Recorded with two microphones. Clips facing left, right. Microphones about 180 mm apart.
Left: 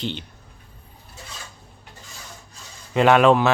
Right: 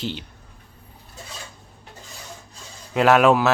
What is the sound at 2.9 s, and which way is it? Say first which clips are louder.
Speech: left 1 dB; 5° right (ahead or behind).